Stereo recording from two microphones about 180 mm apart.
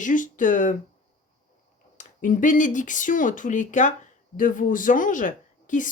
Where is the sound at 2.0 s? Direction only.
45° left (ahead or behind).